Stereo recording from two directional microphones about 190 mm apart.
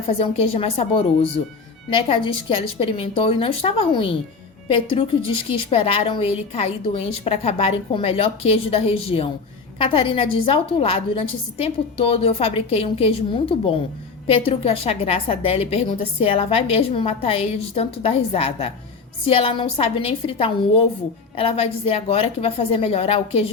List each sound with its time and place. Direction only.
0.1 s a woman's voice: 30° left (ahead or behind)